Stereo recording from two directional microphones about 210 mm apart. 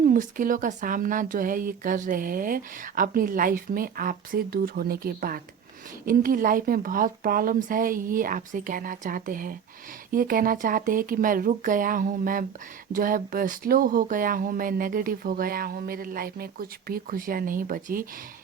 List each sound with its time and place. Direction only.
0.0 s a woman's voice: 40° right (ahead or behind)